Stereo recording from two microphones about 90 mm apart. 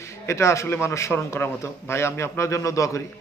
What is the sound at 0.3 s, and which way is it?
A man's voice, 30° left (ahead or behind).